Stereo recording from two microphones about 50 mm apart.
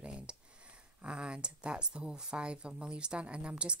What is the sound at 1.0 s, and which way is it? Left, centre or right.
Speech, right.